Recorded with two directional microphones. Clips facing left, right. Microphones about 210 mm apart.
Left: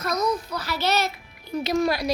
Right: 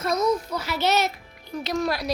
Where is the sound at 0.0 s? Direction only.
25° right (ahead or behind).